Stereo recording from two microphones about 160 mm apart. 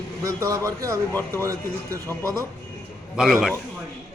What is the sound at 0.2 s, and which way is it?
Speech, 20° right (ahead or behind).